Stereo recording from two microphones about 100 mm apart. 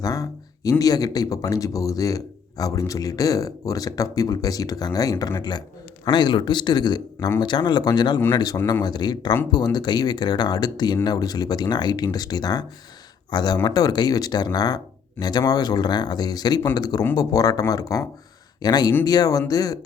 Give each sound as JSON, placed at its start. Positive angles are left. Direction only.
{"t": 0.0, "sound": "speech", "side_deg": 35}